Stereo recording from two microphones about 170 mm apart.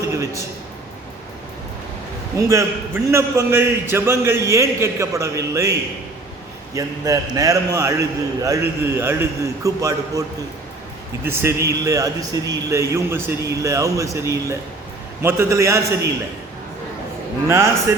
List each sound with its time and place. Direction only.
0.1 s a sound: 15° right (ahead or behind)
2.4 s a man's voice: 15° right (ahead or behind)
6.7 s a man's voice: 20° right (ahead or behind)
11.3 s a man's voice: 15° right (ahead or behind)